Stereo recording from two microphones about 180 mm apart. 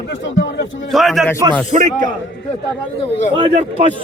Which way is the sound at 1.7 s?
45° right (ahead or behind).